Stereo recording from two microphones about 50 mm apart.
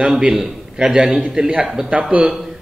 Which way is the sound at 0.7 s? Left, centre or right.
Centre.